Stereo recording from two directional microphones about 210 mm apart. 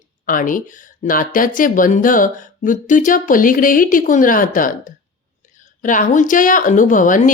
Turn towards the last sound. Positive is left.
turn(degrees=40)  # may be behind; listen again after turning